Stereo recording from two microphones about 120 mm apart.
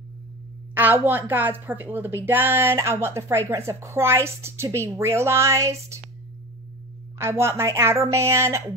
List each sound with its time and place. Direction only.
0.7 s a woman's voice: 15° right (ahead or behind)
7.2 s a woman's voice: 20° right (ahead or behind)